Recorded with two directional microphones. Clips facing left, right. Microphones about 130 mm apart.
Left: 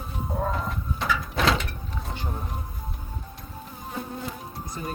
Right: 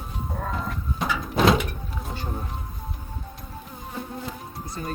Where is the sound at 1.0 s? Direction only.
20° right (ahead or behind).